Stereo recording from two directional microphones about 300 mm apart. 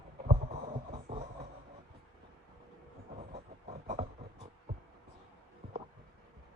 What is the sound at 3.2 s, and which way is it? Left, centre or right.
Train, right.